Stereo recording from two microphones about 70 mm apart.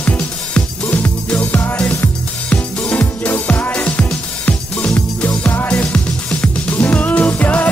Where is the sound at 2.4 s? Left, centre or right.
Left.